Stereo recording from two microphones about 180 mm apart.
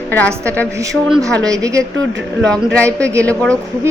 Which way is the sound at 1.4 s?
20° right (ahead or behind).